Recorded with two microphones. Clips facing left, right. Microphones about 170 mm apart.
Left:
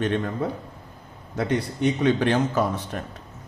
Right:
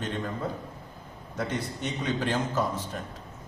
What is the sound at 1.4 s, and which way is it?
Speech, 70° left (ahead or behind).